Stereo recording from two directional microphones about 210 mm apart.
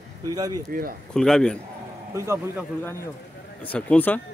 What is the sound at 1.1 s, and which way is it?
Speech, 5° left (ahead or behind).